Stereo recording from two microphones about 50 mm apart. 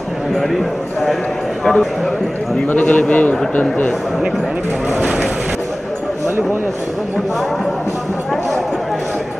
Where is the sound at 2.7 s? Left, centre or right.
Left.